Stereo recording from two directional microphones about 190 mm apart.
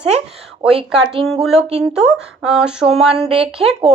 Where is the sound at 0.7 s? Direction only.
5° right (ahead or behind).